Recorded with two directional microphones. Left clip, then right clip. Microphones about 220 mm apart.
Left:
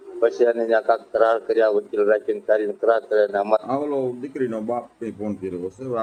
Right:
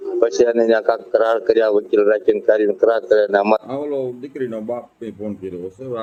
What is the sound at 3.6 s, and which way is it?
Speech, 10° left (ahead or behind).